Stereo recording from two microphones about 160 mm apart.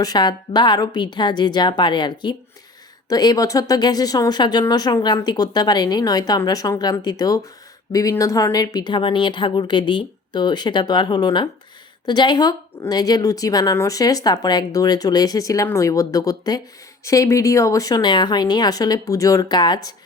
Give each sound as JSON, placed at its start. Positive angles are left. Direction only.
{"t": 0.0, "sound": "a woman's voice", "side_deg": 25}